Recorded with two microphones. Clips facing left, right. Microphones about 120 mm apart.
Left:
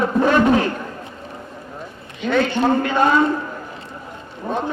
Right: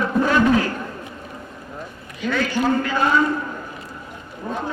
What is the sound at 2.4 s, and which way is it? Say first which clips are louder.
Speech: left 1 dB; 25° left (ahead or behind).